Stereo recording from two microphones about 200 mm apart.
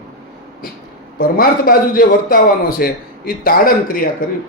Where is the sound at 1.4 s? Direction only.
45° left (ahead or behind).